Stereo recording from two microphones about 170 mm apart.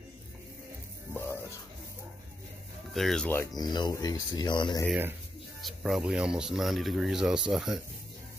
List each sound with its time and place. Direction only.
1.1 s music: 15° left (ahead or behind)
2.9 s speech: centre (ahead or behind)
3.3 s speech: 20° left (ahead or behind)
5.6 s speech: centre (ahead or behind)